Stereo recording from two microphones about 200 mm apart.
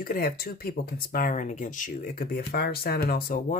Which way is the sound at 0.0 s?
45° left (ahead or behind).